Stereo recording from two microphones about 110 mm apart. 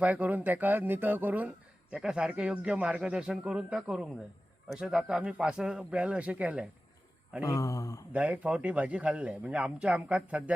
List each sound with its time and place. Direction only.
0.0 s speech: 15° right (ahead or behind)
7.4 s a sound: 30° left (ahead or behind)
8.1 s speech: 10° right (ahead or behind)